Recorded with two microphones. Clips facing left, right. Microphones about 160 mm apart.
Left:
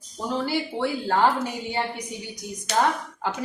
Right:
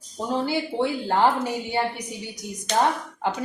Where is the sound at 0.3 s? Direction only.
20° right (ahead or behind).